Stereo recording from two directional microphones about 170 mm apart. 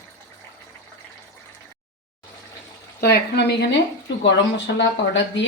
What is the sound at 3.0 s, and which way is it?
A woman's voice, 70° left (ahead or behind).